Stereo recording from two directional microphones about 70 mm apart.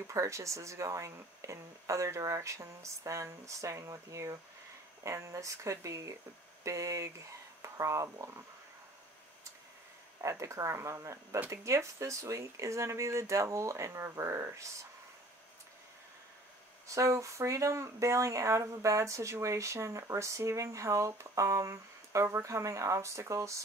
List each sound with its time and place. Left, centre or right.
0.0 s speech: right
10.2 s speech: right
16.8 s speech: right